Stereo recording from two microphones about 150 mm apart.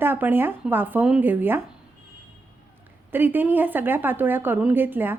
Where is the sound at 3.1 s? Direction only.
15° right (ahead or behind).